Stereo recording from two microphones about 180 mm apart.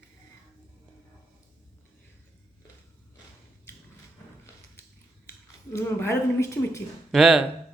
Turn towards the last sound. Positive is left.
turn(degrees=0)  # may be behind; listen again after turning